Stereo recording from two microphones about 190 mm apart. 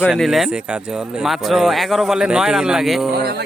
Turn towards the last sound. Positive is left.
turn(degrees=-55)  # may be behind; listen again after turning